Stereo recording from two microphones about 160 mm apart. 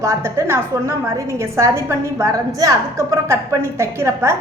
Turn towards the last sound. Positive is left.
turn(degrees=-15)  # may be behind; listen again after turning